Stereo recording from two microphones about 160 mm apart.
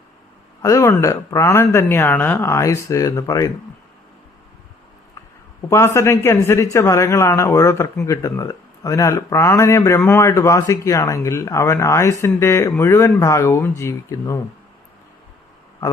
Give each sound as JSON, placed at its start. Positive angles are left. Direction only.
{"t": 0.6, "sound": "speech", "side_deg": 20}
{"t": 5.6, "sound": "a man's voice", "side_deg": 15}